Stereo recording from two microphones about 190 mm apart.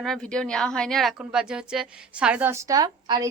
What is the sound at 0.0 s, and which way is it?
A woman's voice, 5° left (ahead or behind).